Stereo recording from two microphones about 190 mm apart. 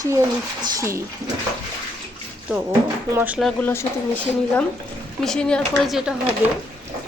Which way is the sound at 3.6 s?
10° left (ahead or behind).